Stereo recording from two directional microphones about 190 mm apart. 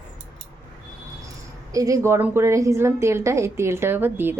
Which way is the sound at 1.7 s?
15° right (ahead or behind).